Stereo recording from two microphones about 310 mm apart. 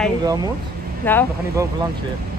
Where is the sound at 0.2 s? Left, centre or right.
Centre.